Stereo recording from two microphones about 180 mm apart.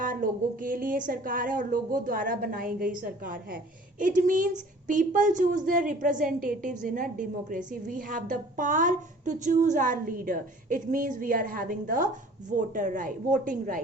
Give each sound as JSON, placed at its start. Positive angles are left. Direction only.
{"t": 0.0, "sound": "a woman's voice", "side_deg": -50}